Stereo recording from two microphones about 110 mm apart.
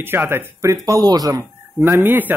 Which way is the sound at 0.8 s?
35° right (ahead or behind).